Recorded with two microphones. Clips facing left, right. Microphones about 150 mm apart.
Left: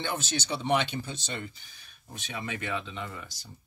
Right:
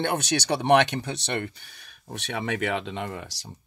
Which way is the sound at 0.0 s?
65° right (ahead or behind).